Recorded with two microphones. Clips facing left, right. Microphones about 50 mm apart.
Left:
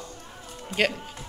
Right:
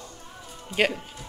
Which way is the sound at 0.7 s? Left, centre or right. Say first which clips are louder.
Right 1 dB; left.